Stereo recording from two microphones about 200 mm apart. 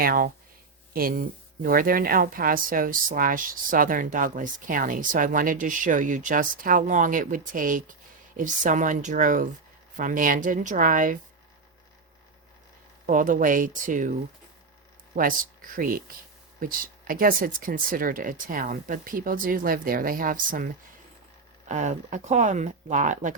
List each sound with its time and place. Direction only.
0.0 s speech: 45° right (ahead or behind)
13.1 s speech: 45° right (ahead or behind)
15.1 s speech: 45° right (ahead or behind)
21.7 s speech: 35° right (ahead or behind)